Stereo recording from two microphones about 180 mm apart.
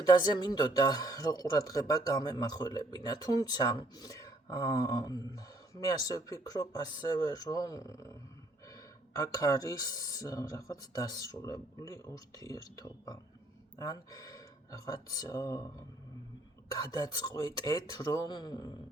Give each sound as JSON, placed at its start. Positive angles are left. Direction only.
{"t": 0.0, "sound": "speech", "side_deg": 20}
{"t": 16.7, "sound": "speech", "side_deg": 20}